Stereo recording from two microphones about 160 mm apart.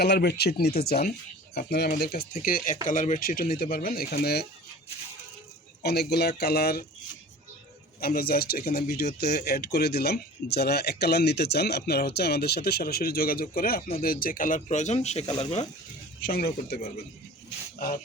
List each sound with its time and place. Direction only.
0.0 s speech: 85° left
2.4 s speech: 65° left (ahead or behind); by 4.4 s 80° left
5.8 s speech: 90° left
8.0 s speech: 70° left (ahead or behind)
9.2 s speech: 90° left; by 15.6 s 40° left (ahead or behind)
16.2 s speech: 70° left (ahead or behind)
17.7 s speech: 60° left (ahead or behind)